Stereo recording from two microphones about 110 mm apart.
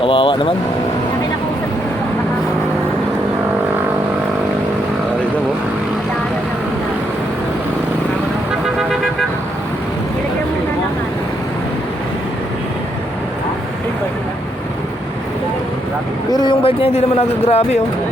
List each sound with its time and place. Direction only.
0.0 s speech: 55° left (ahead or behind)
16.3 s speech: 45° left (ahead or behind); by 17.7 s 70° left (ahead or behind)